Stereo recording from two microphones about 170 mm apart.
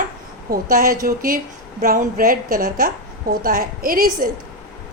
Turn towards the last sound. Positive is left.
turn(degrees=-60)  # may be behind; listen again after turning